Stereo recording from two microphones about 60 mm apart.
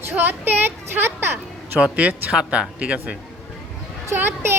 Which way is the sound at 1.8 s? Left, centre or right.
Right.